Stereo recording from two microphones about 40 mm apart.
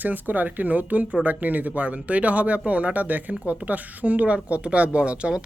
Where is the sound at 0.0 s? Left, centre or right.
Right.